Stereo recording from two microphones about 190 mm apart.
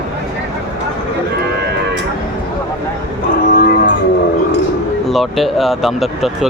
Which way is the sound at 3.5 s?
50° left (ahead or behind).